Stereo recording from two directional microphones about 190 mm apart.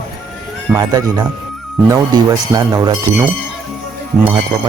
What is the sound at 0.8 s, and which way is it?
Speech, 20° right (ahead or behind).